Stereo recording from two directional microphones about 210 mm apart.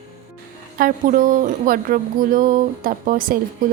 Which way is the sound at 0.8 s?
40° right (ahead or behind).